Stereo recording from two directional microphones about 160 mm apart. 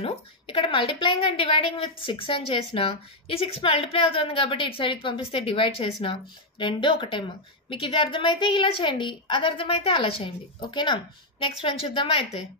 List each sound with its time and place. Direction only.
0.0 s a woman's voice: 35° left (ahead or behind)